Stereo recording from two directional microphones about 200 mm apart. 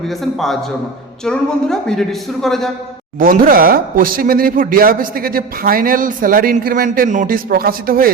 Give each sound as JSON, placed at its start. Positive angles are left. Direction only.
{"t": 0.3, "sound": "speech", "side_deg": 0}
{"t": 3.2, "sound": "speech", "side_deg": -45}